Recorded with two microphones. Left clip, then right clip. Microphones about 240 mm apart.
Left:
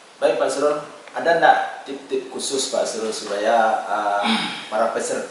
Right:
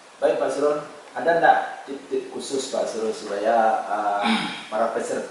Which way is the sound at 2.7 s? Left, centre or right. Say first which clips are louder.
Even; centre.